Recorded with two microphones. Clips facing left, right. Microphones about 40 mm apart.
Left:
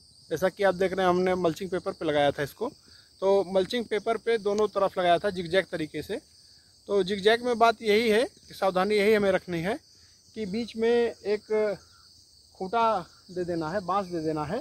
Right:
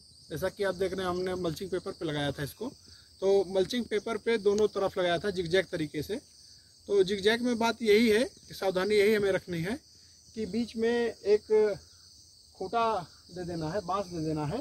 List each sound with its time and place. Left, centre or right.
0.6 s speech: left
1.7 s speech: left
3.9 s speech: left
4.2 s speech: centre
4.7 s speech: centre
5.9 s speech: left
12.5 s cricket: left
13.7 s speech: left